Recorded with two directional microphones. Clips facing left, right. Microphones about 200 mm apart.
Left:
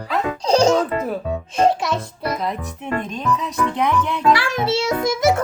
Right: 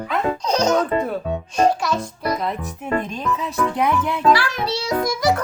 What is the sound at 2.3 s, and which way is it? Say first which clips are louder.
Speech: even; centre (ahead or behind).